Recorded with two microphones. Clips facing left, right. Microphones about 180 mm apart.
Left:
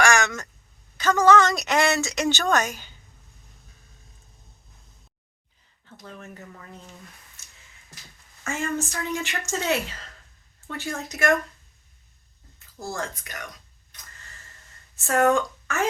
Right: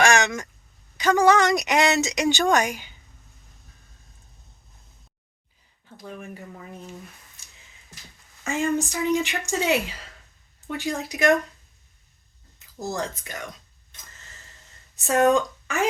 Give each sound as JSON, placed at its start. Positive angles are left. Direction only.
{"t": 0.0, "sound": "a sound", "side_deg": -20}
{"t": 0.9, "sound": "a woman's voice", "side_deg": -15}
{"t": 6.1, "sound": "a woman's voice", "side_deg": -15}
{"t": 8.4, "sound": "a woman's voice", "side_deg": -15}
{"t": 12.5, "sound": "speech", "side_deg": -20}
{"t": 14.9, "sound": "speech", "side_deg": -20}